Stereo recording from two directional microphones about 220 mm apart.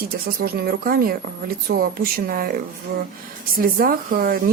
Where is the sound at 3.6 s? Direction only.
40° right (ahead or behind).